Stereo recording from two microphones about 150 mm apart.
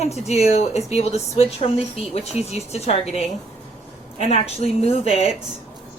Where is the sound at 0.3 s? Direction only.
45° left (ahead or behind).